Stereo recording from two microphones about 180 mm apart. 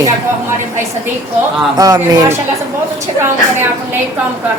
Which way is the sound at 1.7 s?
20° right (ahead or behind).